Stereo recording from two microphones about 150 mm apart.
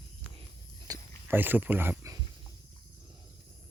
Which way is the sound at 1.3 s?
15° right (ahead or behind).